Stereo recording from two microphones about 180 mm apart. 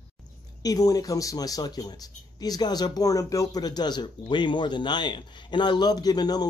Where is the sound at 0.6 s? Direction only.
20° left (ahead or behind).